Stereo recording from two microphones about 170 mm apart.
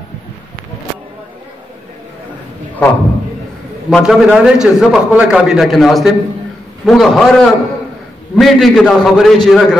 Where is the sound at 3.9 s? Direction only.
Centre (ahead or behind).